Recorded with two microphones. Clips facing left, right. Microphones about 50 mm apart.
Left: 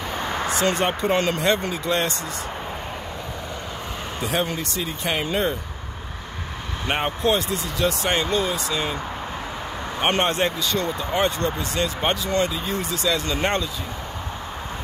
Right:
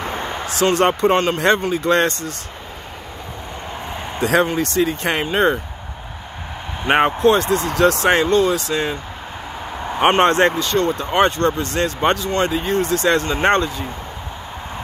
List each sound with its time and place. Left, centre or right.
0.1 s a sound: right
0.7 s speech: right
1.5 s speech: right
4.2 s speech: right
6.9 s speech: right
9.9 s speech: right
10.5 s speech: right